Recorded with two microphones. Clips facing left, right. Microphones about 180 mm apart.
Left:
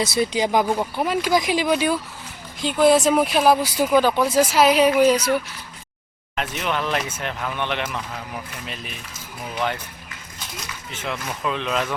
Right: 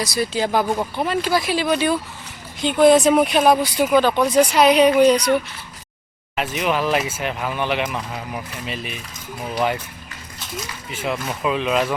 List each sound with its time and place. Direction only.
0.0 s speech: 20° left (ahead or behind); by 5.2 s 5° left (ahead or behind)
6.3 s speech: 5° right (ahead or behind)
10.9 s speech: 10° right (ahead or behind)